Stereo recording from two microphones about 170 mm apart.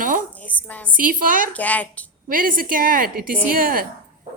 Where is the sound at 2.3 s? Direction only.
55° right (ahead or behind).